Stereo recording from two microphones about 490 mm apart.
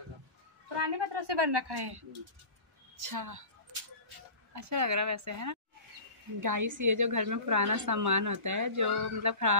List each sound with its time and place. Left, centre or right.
0.7 s a woman's voice: right
3.0 s a woman's voice: right
4.6 s a woman's voice: right